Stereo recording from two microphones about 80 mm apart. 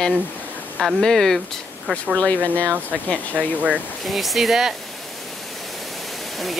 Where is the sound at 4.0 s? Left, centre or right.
Centre.